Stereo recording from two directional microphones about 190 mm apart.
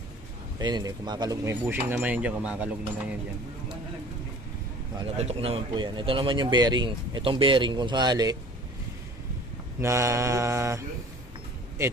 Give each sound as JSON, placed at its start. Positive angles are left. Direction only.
{"t": 0.6, "sound": "speech", "side_deg": -20}
{"t": 5.1, "sound": "a man's voice", "side_deg": -35}
{"t": 9.8, "sound": "speech", "side_deg": -15}